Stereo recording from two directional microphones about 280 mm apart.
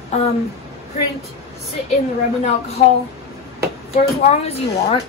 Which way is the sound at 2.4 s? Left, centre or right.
Left.